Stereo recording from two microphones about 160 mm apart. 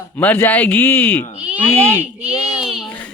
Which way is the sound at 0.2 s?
10° left (ahead or behind).